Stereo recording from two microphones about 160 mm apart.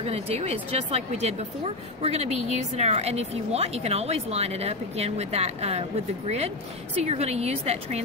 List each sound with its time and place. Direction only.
0.0 s a woman's voice: 40° right (ahead or behind)